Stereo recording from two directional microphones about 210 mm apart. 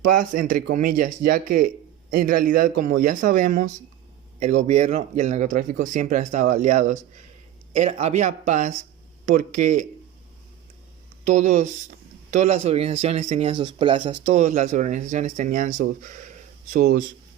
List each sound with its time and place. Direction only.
0.1 s speech: 40° right (ahead or behind)
11.3 s speech: 35° right (ahead or behind)
14.3 s speech: 35° right (ahead or behind)